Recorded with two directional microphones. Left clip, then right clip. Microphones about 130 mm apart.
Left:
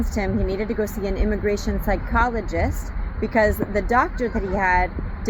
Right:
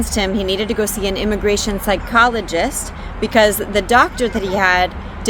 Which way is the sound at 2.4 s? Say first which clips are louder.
Right 7 dB; 50° right (ahead or behind).